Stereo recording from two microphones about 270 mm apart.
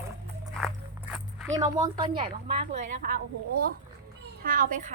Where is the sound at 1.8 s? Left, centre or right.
Centre.